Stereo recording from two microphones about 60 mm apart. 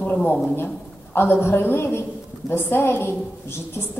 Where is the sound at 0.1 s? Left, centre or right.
Left.